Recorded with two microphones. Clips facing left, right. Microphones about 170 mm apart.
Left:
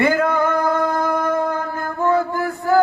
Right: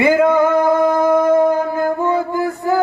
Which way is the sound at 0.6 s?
20° right (ahead or behind).